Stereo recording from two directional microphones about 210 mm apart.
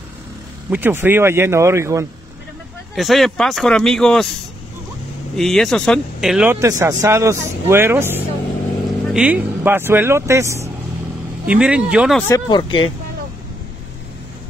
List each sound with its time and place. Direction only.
0.7 s speech: 10° right (ahead or behind)
3.0 s speech: centre (ahead or behind)
5.3 s speech: centre (ahead or behind)
12.2 s speech: 15° left (ahead or behind)